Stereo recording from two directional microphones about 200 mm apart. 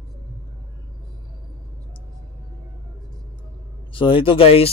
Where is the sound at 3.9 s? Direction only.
25° left (ahead or behind).